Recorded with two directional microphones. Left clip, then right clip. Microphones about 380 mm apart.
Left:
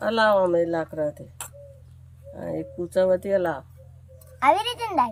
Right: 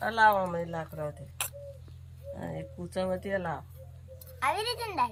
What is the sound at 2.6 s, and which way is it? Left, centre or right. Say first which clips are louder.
A child's voice: left 13 dB; left.